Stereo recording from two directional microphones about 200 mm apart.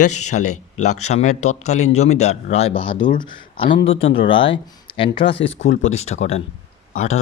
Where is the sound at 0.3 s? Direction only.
45° left (ahead or behind).